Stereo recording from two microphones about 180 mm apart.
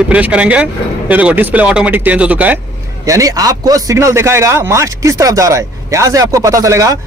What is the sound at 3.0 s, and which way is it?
Speech, 20° right (ahead or behind).